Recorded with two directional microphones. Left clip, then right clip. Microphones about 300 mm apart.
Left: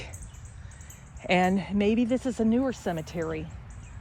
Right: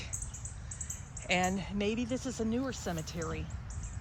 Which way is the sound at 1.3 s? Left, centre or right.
Left.